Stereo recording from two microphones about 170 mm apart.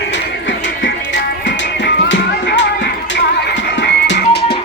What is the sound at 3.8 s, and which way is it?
Music, 85° left.